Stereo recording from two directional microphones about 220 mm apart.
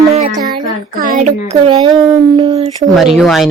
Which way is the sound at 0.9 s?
40° right (ahead or behind).